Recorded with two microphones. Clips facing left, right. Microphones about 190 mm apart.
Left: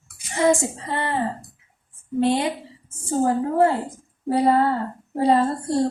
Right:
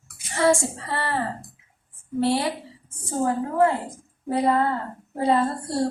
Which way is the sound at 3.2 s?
30° left (ahead or behind).